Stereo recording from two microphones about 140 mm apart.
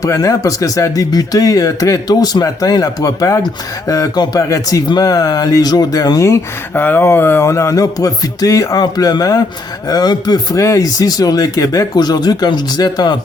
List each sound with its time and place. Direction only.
0.0 s speech: 25° left (ahead or behind)